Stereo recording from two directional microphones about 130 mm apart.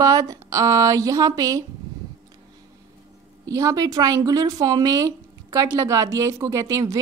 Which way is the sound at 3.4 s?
25° right (ahead or behind).